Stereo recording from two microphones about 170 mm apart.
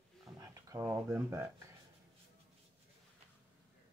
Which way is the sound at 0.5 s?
20° right (ahead or behind).